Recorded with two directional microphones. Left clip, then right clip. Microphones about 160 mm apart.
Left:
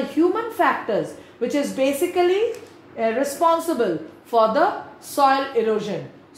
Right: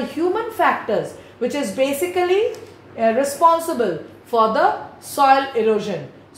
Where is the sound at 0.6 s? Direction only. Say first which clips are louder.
Right 2 dB; 30° left (ahead or behind).